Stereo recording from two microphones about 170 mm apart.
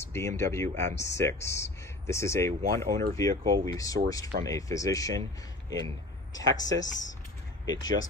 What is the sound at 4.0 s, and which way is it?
Speech, 55° right (ahead or behind).